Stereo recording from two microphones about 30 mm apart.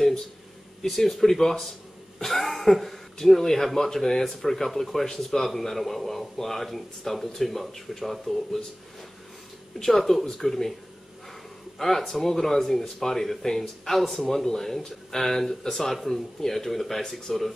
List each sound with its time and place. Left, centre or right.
0.8 s a man's voice: centre
2.1 s cough: centre
2.7 s a man's voice: centre
5.0 s speech: left
5.5 s a man's voice: centre
9.8 s a man's voice: centre
12.3 s a man's voice: centre